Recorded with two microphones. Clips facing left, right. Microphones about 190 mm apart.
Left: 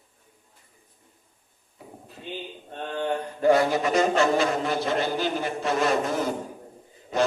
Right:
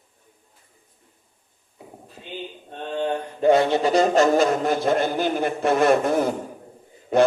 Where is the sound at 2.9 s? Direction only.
20° right (ahead or behind).